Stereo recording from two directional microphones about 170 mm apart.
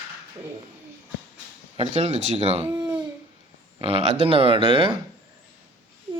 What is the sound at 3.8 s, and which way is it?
Speech, 35° right (ahead or behind).